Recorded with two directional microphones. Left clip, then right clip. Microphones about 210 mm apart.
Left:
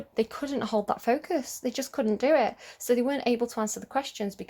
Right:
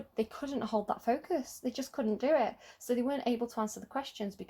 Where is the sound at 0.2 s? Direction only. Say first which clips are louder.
Left 6 dB; 30° left (ahead or behind).